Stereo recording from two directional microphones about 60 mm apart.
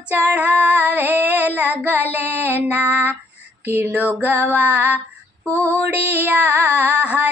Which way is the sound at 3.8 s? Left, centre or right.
Right.